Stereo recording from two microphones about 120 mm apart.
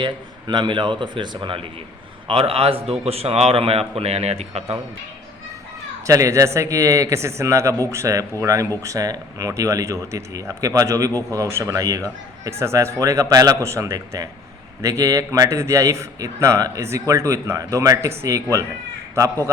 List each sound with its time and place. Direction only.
0.0 s a man's voice: 40° right (ahead or behind); by 4.8 s 60° right (ahead or behind)
6.1 s a man's voice: 25° right (ahead or behind)